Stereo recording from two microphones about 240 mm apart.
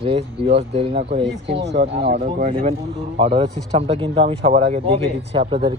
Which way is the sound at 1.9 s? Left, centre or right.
Right.